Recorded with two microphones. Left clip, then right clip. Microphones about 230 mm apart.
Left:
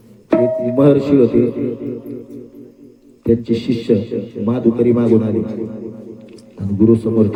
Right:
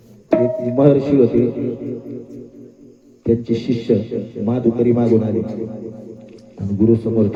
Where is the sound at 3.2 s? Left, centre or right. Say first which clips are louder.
Left 2 dB; left.